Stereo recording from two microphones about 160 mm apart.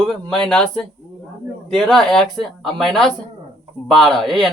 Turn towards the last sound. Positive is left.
turn(degrees=5)  # may be behind; listen again after turning